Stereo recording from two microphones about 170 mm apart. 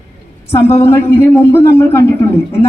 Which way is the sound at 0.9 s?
15° left (ahead or behind).